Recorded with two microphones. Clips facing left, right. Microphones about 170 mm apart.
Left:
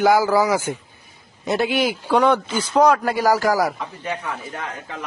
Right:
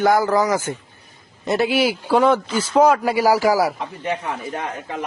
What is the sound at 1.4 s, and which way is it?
A man's voice, centre (ahead or behind).